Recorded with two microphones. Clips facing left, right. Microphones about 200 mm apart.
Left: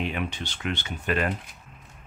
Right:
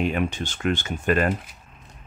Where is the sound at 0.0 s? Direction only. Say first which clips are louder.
Right 6 dB; 45° right (ahead or behind).